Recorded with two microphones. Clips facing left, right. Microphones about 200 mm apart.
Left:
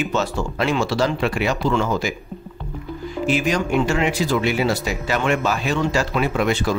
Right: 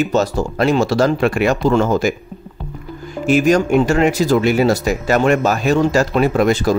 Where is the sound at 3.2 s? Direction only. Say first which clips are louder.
Right 7 dB; 45° right (ahead or behind).